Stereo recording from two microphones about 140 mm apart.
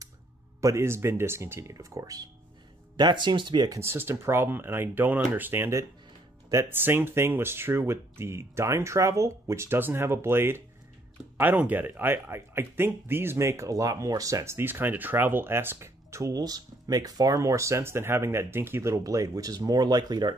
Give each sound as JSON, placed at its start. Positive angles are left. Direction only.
{"t": 0.6, "sound": "speech", "side_deg": -20}